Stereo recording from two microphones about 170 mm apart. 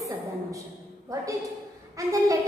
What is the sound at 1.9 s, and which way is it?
Speech, 20° right (ahead or behind).